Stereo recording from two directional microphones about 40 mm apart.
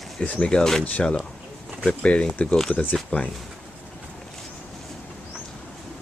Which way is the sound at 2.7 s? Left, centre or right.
Left.